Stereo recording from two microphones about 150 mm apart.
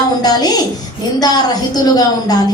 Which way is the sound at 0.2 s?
25° left (ahead or behind).